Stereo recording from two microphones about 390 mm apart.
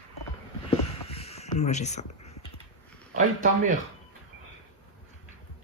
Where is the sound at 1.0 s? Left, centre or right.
Centre.